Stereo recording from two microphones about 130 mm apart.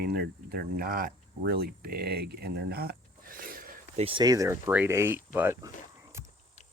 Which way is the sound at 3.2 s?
90° right.